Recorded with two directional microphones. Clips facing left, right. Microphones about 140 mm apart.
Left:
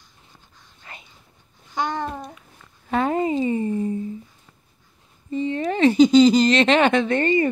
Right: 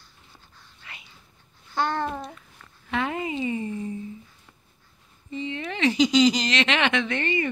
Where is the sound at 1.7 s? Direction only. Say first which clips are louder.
Even; 15° left (ahead or behind).